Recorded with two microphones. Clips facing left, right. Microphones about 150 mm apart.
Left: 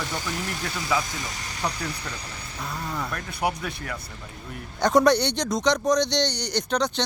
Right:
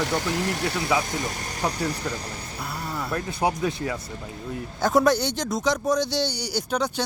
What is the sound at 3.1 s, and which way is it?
Speech, 30° right (ahead or behind).